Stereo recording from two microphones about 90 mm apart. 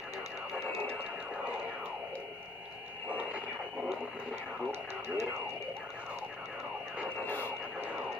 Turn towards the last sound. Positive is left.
turn(degrees=25)  # may be behind; listen again after turning